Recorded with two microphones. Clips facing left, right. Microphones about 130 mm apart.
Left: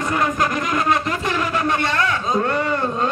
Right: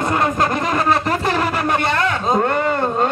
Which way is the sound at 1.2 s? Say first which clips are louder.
Right 2 dB; 45° right (ahead or behind).